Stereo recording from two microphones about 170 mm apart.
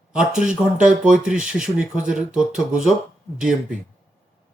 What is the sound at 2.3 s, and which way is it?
Speech, 5° right (ahead or behind).